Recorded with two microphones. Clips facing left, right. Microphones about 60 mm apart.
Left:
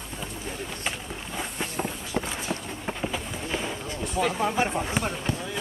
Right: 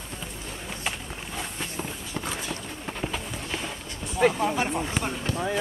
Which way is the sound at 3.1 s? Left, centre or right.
Centre.